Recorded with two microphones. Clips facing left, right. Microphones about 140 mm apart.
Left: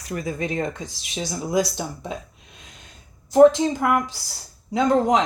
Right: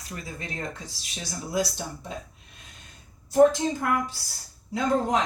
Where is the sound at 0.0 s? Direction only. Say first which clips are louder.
Left 10 dB; 85° left.